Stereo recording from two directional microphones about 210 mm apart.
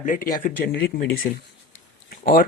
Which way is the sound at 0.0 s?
40° left (ahead or behind).